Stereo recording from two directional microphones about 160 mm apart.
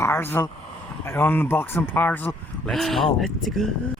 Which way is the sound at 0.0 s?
15° left (ahead or behind).